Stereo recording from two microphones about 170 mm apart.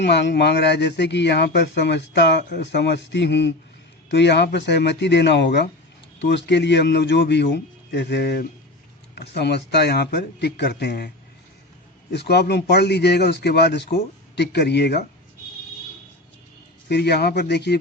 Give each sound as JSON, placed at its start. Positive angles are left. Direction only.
{"t": 0.0, "sound": "a man's voice", "side_deg": 85}
{"t": 9.1, "sound": "speech", "side_deg": 85}
{"t": 12.1, "sound": "speech", "side_deg": 75}
{"t": 16.9, "sound": "speech", "side_deg": 75}